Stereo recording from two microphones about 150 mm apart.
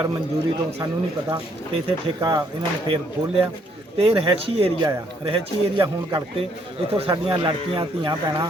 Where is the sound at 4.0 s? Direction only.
40° right (ahead or behind).